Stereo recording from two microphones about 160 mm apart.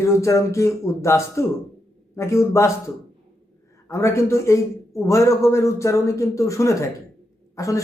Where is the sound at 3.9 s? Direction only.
20° left (ahead or behind).